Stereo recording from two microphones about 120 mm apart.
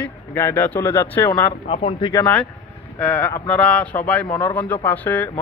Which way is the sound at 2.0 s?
40° left (ahead or behind).